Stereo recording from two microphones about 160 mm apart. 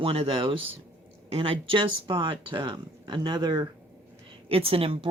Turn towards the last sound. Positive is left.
turn(degrees=-35)  # may be behind; listen again after turning